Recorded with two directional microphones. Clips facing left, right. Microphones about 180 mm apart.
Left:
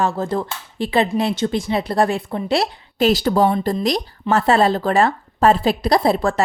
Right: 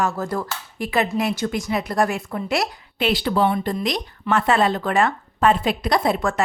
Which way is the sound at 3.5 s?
30° left (ahead or behind).